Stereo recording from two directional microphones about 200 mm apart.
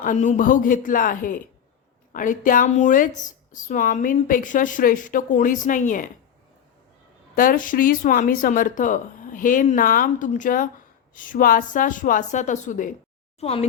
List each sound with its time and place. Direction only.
0.0 s speech: 40° left (ahead or behind)
7.3 s speech: 45° left (ahead or behind)